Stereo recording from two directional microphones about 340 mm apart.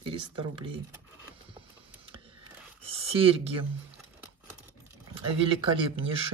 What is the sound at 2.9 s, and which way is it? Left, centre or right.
Speech, centre.